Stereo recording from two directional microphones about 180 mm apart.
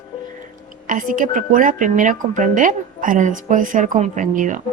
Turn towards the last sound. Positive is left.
turn(degrees=-45)  # may be behind; listen again after turning